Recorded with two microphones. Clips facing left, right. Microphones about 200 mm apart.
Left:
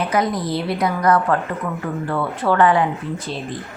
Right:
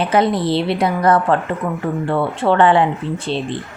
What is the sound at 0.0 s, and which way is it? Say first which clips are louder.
A woman's voice: right 4 dB; 30° right (ahead or behind).